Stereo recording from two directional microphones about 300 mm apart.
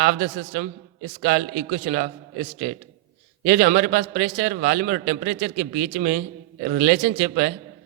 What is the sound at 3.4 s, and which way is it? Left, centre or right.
A man's voice, right.